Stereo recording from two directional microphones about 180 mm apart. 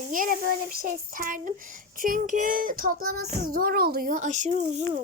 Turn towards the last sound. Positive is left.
turn(degrees=-40)  # may be behind; listen again after turning